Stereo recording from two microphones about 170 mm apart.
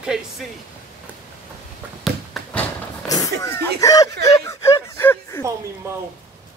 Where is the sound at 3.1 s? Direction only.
20° left (ahead or behind).